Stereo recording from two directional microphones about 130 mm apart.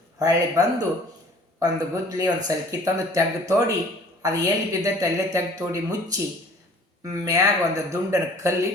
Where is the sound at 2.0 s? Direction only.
25° right (ahead or behind).